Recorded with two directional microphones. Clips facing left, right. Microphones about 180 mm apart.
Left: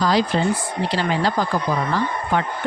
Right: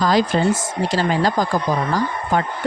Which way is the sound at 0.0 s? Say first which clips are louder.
Right 2 dB; 45° right (ahead or behind).